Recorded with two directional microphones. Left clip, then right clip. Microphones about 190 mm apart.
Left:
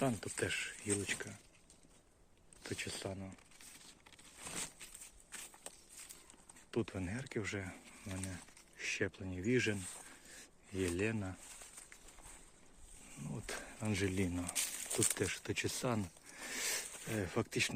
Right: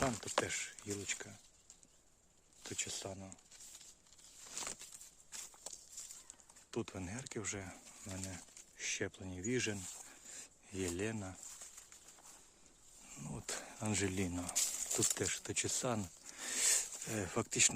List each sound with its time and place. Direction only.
0.0 s speech: centre (ahead or behind)
2.6 s speech: 5° right (ahead or behind)
6.7 s speech: 5° right (ahead or behind)
10.2 s a sound: 20° right (ahead or behind)
13.1 s speech: 20° right (ahead or behind)
14.5 s speech: centre (ahead or behind)
15.1 s speech: 10° right (ahead or behind)